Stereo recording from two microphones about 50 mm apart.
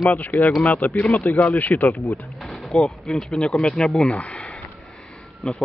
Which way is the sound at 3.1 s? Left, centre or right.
Centre.